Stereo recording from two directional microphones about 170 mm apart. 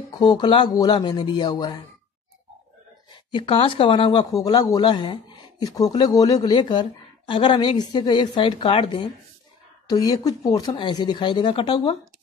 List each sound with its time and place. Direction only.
0.1 s speech: 25° left (ahead or behind)
3.3 s speech: 30° left (ahead or behind)